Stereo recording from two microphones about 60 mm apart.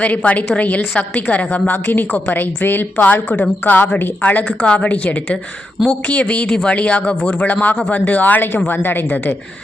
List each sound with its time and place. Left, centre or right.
0.0 s a woman's voice: left